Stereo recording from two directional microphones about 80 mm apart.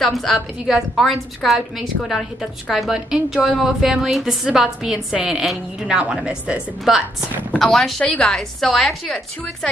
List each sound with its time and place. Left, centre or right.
0.0 s a woman's voice: centre
7.5 s speech: centre
8.0 s a woman's voice: centre
8.3 s a woman's voice: centre